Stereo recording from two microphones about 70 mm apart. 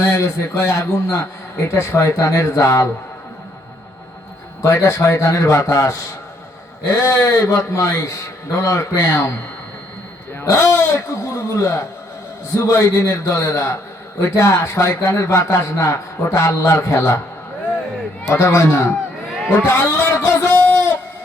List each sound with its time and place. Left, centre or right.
0.0 s a man's voice: left
4.6 s a man's voice: left
9.0 s a man's voice: left
10.4 s a man's voice: left
18.3 s a man's voice: left